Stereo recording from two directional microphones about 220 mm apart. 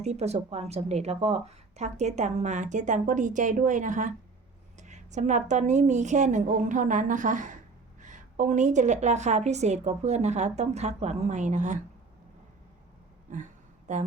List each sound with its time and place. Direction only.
0.0 s speech: 30° right (ahead or behind)
13.9 s speech: 35° right (ahead or behind)